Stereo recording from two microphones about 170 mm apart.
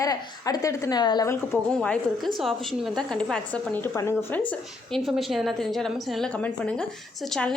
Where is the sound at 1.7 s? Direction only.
5° left (ahead or behind).